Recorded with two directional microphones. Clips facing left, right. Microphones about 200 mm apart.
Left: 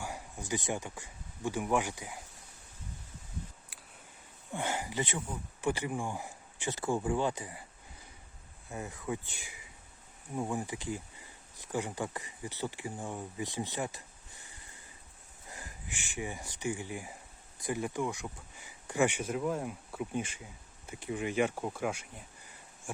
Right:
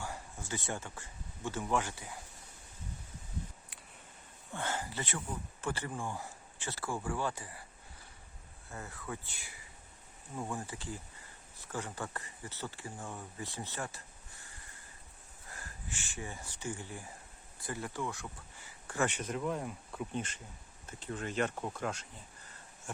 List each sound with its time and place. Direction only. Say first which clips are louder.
0.0 s speech: left 2 dB; 15° left (ahead or behind)
4.5 s speech: left 4 dB; 15° left (ahead or behind)
8.7 s speech: left 6 dB; 15° left (ahead or behind)